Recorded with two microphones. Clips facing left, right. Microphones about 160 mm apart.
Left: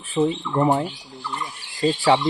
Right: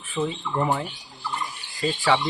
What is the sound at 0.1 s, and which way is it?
Turkey, 35° left (ahead or behind).